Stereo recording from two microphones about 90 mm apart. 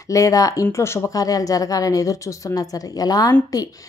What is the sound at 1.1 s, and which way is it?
A woman's voice, 40° left (ahead or behind).